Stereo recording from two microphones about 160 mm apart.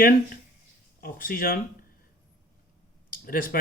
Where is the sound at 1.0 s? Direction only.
65° left (ahead or behind).